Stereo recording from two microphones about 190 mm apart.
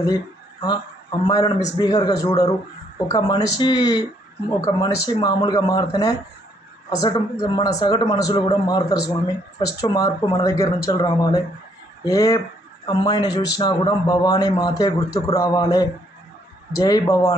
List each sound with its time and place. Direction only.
0.0 s a man's voice: 20° left (ahead or behind)
6.9 s a man's voice: 20° left (ahead or behind)